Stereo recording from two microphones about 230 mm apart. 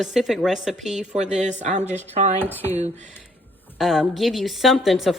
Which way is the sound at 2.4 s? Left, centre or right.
Centre.